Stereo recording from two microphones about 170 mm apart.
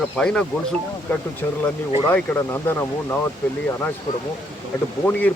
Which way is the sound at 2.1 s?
10° left (ahead or behind).